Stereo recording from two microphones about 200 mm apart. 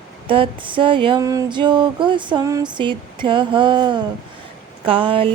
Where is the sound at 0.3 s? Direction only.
25° right (ahead or behind).